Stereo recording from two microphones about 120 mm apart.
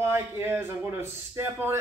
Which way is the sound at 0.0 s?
20° right (ahead or behind).